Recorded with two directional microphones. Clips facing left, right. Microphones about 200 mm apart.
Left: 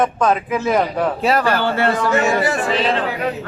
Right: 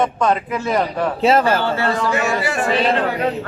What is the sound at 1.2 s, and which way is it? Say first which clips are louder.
Speech: right 4 dB; 25° right (ahead or behind).